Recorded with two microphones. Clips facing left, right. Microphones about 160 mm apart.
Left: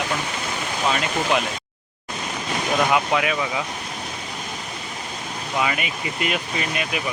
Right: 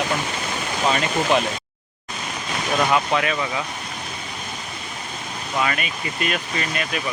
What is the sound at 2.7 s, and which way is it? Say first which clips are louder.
Speech: even; 5° left (ahead or behind).